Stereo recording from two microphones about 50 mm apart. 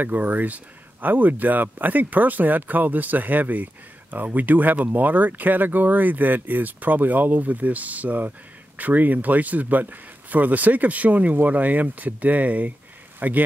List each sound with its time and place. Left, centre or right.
0.0 s speech: right